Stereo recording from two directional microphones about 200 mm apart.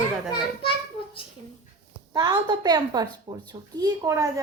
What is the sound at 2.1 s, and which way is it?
A woman's voice, 20° right (ahead or behind).